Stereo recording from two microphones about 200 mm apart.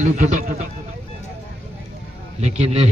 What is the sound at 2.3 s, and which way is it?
Speech, 35° right (ahead or behind).